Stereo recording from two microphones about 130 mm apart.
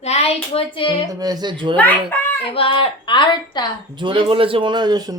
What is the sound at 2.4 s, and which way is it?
A woman's voice, 45° left (ahead or behind).